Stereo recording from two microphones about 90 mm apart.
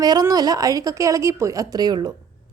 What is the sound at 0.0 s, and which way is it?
A woman's voice, 45° right (ahead or behind).